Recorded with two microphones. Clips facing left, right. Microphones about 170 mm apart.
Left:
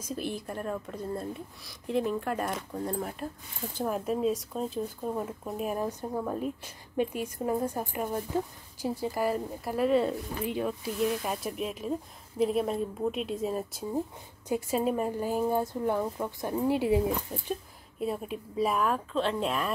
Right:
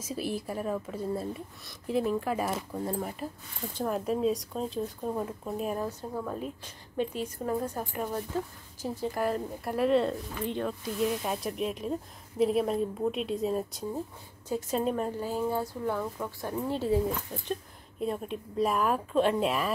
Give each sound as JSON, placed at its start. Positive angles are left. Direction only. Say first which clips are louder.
{"t": 0.0, "sound": "speech", "louder": "right 1 dB", "side_deg": -5}
{"t": 5.9, "sound": "speech", "louder": "left 2 dB", "side_deg": 15}